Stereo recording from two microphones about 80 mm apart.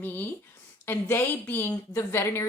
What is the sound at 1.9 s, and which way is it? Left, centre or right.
Speech, left.